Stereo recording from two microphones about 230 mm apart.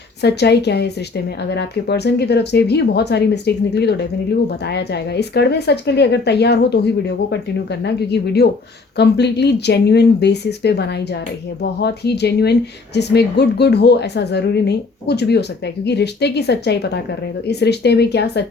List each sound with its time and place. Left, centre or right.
0.2 s speech: left